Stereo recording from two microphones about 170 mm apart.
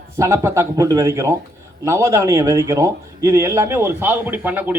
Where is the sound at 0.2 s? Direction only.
15° right (ahead or behind).